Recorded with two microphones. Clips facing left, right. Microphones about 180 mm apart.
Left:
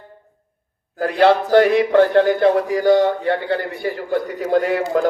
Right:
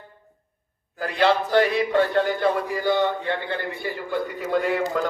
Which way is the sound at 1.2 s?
55° left (ahead or behind).